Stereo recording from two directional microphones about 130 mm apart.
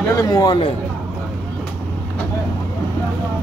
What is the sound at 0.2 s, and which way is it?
Speech, 30° left (ahead or behind).